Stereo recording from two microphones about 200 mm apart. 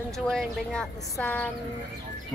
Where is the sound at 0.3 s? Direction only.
Centre (ahead or behind).